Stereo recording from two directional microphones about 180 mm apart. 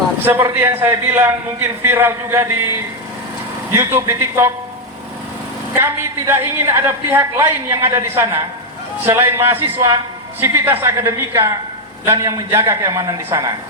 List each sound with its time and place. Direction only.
0.3 s a woman's voice: 15° right (ahead or behind)
3.7 s a woman's voice: 15° right (ahead or behind)
5.7 s a woman's voice: 15° right (ahead or behind)